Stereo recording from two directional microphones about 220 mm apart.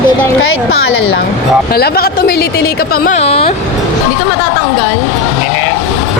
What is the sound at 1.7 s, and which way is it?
A woman's voice, 45° left (ahead or behind).